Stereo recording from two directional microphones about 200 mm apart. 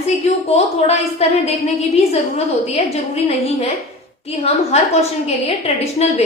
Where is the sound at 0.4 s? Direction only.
30° left (ahead or behind).